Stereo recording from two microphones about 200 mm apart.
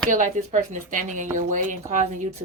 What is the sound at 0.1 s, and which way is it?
A woman's voice, 40° right (ahead or behind).